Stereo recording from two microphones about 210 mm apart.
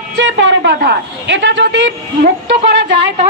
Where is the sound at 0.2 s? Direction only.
60° right (ahead or behind).